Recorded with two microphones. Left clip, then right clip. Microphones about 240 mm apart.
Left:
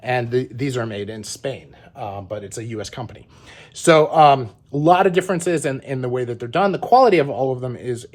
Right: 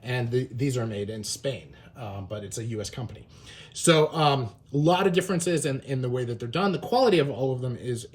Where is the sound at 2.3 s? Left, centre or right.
Left.